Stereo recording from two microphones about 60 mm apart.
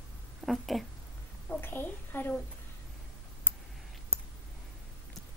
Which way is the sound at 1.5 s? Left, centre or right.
Left.